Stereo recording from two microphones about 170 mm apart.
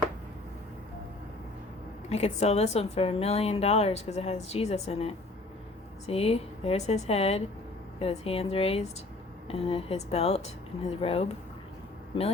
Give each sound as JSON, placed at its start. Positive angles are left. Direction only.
{"t": 2.0, "sound": "a woman's voice", "side_deg": 40}